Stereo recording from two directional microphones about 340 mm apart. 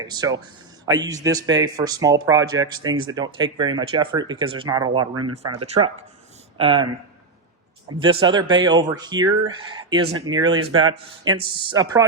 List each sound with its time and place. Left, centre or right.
0.0 s speech: centre
5.1 s speech: right
5.6 s speech: centre
7.9 s speech: centre